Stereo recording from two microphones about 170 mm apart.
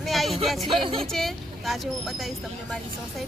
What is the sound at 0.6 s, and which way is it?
Music, 30° right (ahead or behind).